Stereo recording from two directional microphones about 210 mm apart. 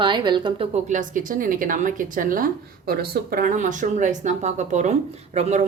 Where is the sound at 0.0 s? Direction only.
20° right (ahead or behind).